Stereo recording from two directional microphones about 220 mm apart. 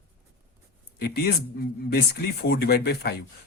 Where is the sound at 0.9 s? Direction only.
45° left (ahead or behind).